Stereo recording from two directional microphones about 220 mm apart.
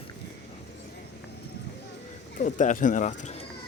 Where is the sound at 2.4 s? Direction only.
35° left (ahead or behind).